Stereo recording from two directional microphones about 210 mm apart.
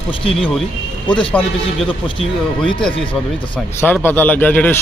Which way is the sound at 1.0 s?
25° left (ahead or behind).